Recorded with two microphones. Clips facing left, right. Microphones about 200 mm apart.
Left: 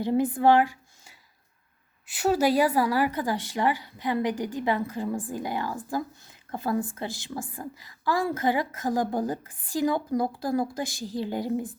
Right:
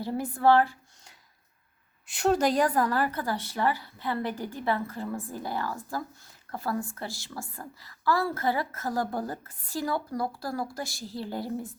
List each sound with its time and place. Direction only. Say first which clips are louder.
0.0 s a woman's voice: left 3 dB; 20° left (ahead or behind)